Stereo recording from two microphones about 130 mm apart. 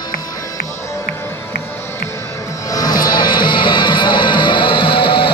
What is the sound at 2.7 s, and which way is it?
Music, 30° left (ahead or behind).